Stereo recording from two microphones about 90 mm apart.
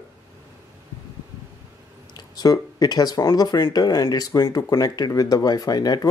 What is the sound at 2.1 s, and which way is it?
Speech, 45° left (ahead or behind).